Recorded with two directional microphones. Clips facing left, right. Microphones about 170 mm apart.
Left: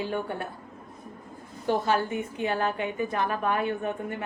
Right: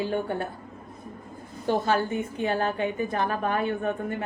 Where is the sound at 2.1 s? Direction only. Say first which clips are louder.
Right 2 dB; 30° right (ahead or behind).